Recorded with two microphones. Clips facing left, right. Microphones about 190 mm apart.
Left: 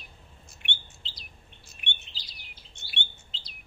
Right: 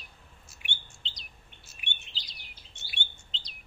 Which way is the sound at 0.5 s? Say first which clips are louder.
Left 3 dB; centre (ahead or behind).